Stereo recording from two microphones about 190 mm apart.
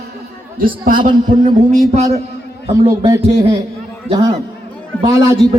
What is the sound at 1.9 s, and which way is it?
Speech, 35° right (ahead or behind).